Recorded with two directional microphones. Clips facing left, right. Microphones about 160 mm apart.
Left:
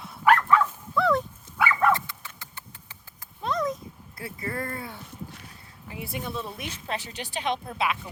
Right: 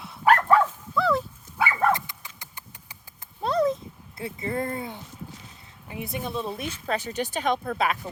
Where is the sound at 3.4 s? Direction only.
30° right (ahead or behind).